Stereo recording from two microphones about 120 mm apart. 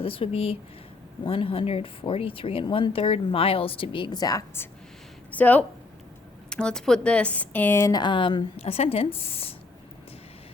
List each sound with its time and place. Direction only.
0.0 s speech: 50° left (ahead or behind); by 4.4 s 30° left (ahead or behind)
5.3 s speech: 15° left (ahead or behind)
7.9 s speech: 40° left (ahead or behind)
8.6 s speech: 55° left (ahead or behind)